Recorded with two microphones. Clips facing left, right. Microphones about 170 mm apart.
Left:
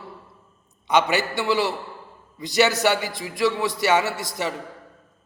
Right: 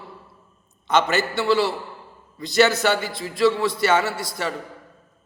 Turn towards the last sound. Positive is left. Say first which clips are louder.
# even
turn(degrees=20)  # may be behind; listen again after turning